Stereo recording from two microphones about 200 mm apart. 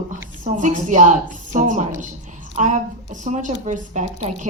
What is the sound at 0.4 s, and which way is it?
Speech, 40° right (ahead or behind).